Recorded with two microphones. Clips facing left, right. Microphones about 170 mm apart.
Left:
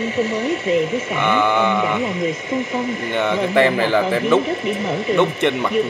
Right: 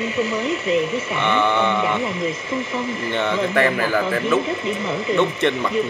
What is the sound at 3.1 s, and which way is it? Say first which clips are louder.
Speech: left 3 dB; 15° left (ahead or behind).